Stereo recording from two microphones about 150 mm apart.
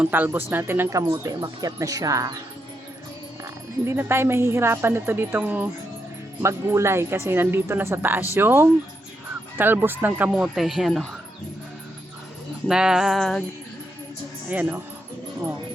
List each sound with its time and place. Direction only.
0.0 s speech: 15° right (ahead or behind)
3.8 s speech: 15° right (ahead or behind); by 11.1 s centre (ahead or behind)
12.6 s speech: 5° right (ahead or behind)
14.5 s speech: 10° right (ahead or behind)